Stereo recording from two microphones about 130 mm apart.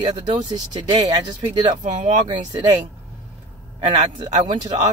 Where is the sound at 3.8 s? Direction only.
35° right (ahead or behind).